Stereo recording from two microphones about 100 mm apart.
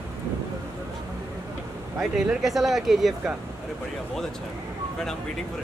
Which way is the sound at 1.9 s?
5° right (ahead or behind).